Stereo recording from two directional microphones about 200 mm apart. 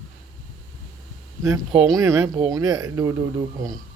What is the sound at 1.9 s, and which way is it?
Speech, 15° right (ahead or behind).